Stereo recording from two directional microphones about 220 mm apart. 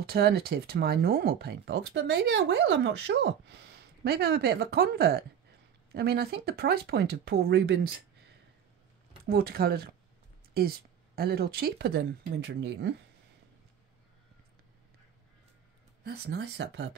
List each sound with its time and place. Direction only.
0.0 s speech: 45° right (ahead or behind)
11.1 s speech: 45° right (ahead or behind)
16.0 s speech: 45° right (ahead or behind)